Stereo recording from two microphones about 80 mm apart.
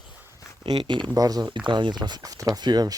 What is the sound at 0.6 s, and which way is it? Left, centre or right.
Speech, right.